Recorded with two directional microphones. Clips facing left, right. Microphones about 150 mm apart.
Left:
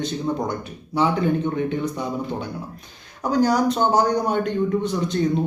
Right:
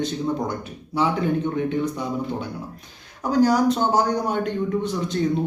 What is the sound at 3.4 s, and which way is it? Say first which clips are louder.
Speech: right 1 dB; 5° right (ahead or behind).